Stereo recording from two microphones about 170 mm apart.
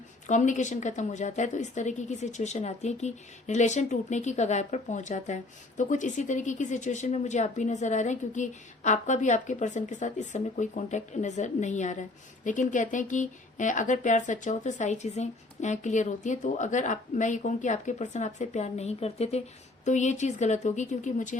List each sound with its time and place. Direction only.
0.3 s a woman's voice: 45° left (ahead or behind)